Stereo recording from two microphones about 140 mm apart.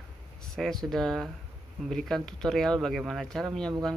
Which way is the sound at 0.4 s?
5° left (ahead or behind).